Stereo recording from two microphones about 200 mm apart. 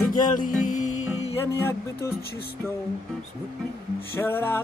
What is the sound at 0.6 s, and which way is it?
Music, 40° left (ahead or behind).